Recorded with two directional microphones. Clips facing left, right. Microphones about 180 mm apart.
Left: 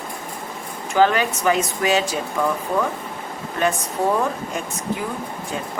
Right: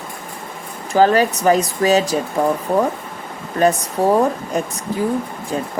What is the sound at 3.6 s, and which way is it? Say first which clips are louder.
Speech: right 6 dB; 35° right (ahead or behind).